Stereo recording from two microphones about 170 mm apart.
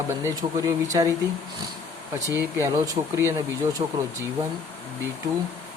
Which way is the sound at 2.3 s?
15° right (ahead or behind).